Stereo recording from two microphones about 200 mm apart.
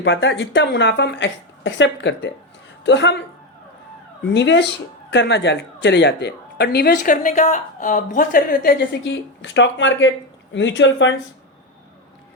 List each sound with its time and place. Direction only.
0.0 s speech: 65° left (ahead or behind)
4.4 s speech: 60° left (ahead or behind); by 8.7 s 45° left (ahead or behind)
8.9 s speech: 60° left (ahead or behind)